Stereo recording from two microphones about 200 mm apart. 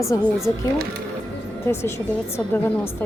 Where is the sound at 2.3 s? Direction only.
10° left (ahead or behind).